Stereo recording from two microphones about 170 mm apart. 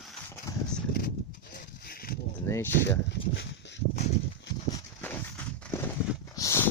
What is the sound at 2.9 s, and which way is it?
Speech, 90° left.